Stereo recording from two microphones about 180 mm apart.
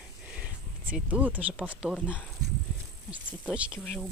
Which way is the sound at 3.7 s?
10° left (ahead or behind).